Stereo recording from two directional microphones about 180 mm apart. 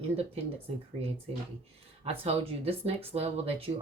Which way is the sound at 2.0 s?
35° right (ahead or behind).